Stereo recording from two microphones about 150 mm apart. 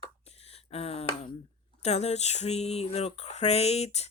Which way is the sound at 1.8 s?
45° left (ahead or behind).